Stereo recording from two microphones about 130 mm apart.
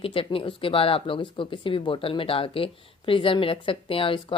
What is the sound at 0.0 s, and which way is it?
A woman's voice, 45° left (ahead or behind).